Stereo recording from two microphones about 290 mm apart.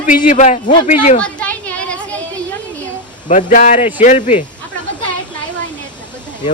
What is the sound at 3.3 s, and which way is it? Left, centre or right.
A man's voice, left.